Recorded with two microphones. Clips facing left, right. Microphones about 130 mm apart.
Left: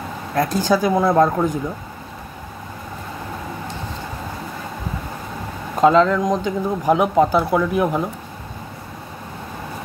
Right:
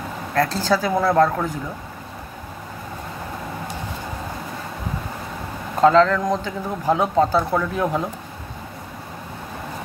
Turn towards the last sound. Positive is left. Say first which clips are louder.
# left 3 dB
turn(degrees=10)  # may be behind; listen again after turning